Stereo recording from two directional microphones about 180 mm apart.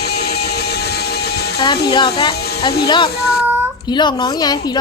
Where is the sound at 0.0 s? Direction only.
65° left (ahead or behind).